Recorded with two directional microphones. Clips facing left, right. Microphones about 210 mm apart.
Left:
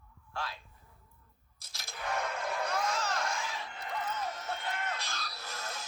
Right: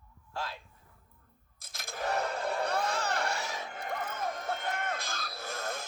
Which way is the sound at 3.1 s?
60° right (ahead or behind).